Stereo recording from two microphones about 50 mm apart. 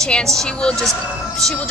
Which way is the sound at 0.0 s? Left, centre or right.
Centre.